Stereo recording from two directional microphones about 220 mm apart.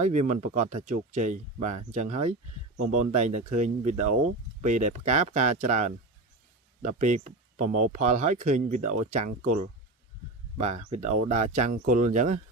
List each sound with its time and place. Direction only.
0.0 s speech: 35° right (ahead or behind)
10.6 s speech: 30° right (ahead or behind)